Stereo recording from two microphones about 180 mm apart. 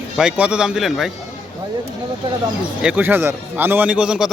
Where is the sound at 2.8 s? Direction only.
10° right (ahead or behind).